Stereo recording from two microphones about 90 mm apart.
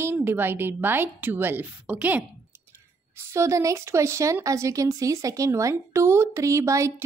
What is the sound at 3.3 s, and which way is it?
A woman's voice, 35° right (ahead or behind).